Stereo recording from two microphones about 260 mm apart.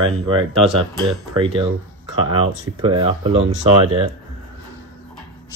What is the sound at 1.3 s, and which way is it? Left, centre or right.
Speech, centre.